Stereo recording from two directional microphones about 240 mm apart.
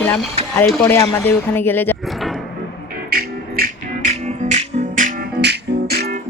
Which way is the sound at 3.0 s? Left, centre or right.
Right.